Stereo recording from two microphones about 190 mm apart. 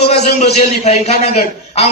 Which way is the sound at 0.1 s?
35° left (ahead or behind).